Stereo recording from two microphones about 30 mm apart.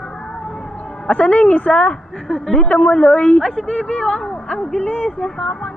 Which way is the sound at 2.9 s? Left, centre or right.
Left.